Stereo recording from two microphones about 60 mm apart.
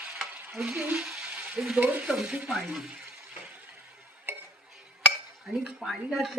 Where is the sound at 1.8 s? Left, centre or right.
Right.